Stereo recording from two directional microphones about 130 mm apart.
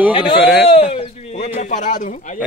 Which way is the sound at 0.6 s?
45° left (ahead or behind).